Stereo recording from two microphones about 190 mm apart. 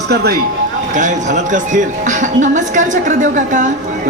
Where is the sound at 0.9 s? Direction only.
40° right (ahead or behind).